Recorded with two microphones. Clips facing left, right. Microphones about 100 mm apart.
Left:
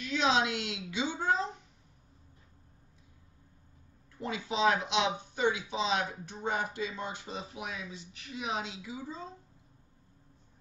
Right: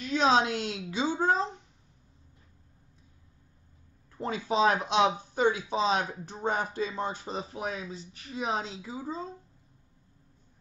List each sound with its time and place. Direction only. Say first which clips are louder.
0.0 s a woman's voice: right 4 dB; 40° right (ahead or behind)
4.2 s speech: right 4 dB; 40° right (ahead or behind)